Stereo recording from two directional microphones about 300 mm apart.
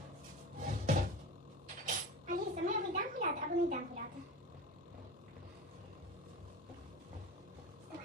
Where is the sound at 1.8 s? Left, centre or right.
Right.